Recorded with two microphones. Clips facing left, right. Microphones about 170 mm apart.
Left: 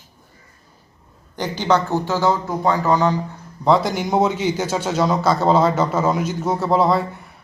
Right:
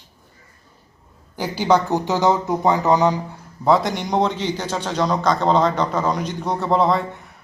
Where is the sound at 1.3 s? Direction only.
10° right (ahead or behind).